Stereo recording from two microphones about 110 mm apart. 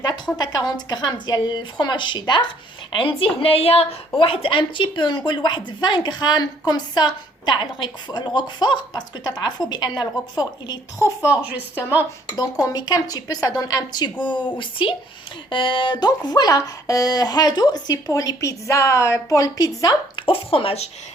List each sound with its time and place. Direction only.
0.0 s a woman's voice: 40° left (ahead or behind)
2.9 s a woman's voice: 55° left (ahead or behind)
11.2 s speech: 15° right (ahead or behind)
12.4 s a woman's voice: 35° left (ahead or behind)
20.1 s a woman's voice: 55° left (ahead or behind)